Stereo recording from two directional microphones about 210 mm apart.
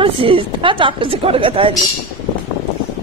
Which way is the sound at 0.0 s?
25° right (ahead or behind).